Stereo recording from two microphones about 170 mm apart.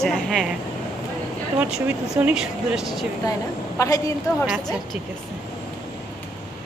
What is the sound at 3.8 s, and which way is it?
Speech, 20° left (ahead or behind).